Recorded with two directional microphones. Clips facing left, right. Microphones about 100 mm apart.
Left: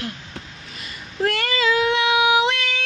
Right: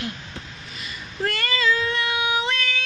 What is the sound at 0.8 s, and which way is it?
Child singing, 70° left (ahead or behind).